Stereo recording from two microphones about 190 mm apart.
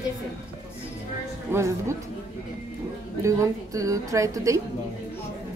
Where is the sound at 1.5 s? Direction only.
15° right (ahead or behind).